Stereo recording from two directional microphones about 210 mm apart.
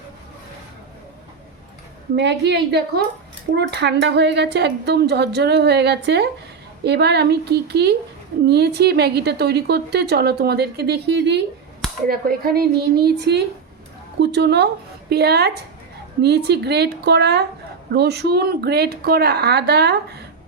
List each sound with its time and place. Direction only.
2.1 s a woman's voice: 55° right (ahead or behind)